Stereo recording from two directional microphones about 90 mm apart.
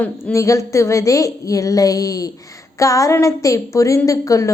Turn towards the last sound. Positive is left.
turn(degrees=40)  # may be behind; listen again after turning